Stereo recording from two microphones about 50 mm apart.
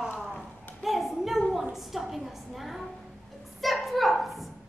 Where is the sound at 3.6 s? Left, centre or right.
Centre.